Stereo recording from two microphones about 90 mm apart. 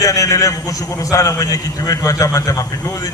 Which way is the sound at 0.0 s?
35° left (ahead or behind).